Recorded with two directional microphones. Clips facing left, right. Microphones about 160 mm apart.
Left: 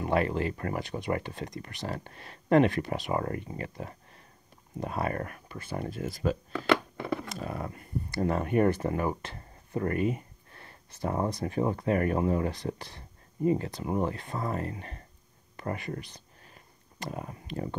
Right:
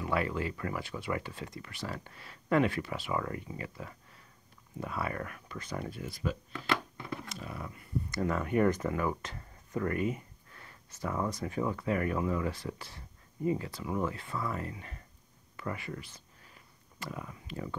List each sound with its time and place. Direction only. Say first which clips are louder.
0.0 s a sound: left 5 dB; 50° left (ahead or behind)
0.4 s speech: left 4 dB; 50° left (ahead or behind)
1.1 s speech: left 4 dB; 60° left (ahead or behind)
1.4 s speech: left 4 dB; 40° left (ahead or behind)
6.0 s speech: left 8 dB; 45° left (ahead or behind)
6.5 s a sound: left 7 dB; 80° left
7.2 s dog: left 6 dB; 45° left (ahead or behind)
8.1 s speech: left 4 dB; 30° left (ahead or behind)
17.1 s speech: left 5 dB; 40° left (ahead or behind)